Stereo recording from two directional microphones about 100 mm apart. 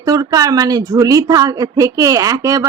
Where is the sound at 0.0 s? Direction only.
40° right (ahead or behind).